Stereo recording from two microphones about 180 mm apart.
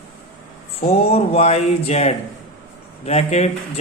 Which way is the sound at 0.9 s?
35° left (ahead or behind).